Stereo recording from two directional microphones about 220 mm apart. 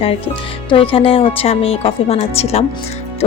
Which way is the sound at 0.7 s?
25° left (ahead or behind).